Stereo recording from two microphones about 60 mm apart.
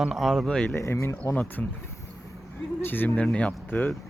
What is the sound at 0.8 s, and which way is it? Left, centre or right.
Speech, left.